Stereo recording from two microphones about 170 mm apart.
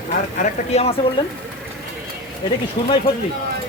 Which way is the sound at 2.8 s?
25° left (ahead or behind).